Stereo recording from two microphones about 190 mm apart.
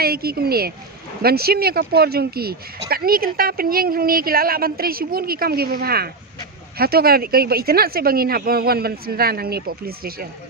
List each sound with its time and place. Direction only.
0.0 s speech: 55° right (ahead or behind)